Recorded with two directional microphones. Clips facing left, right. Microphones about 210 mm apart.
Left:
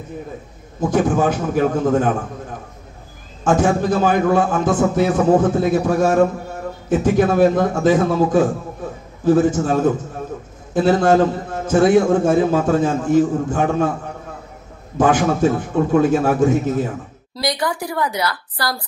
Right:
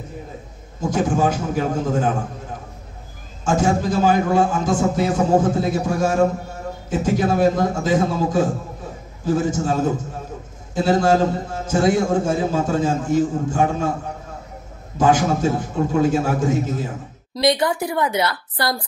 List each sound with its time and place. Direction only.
0.7 s a man's voice: 55° left (ahead or behind)
3.4 s a man's voice: 60° left (ahead or behind)
15.0 s a man's voice: 60° left (ahead or behind)
17.4 s a woman's voice: 25° right (ahead or behind)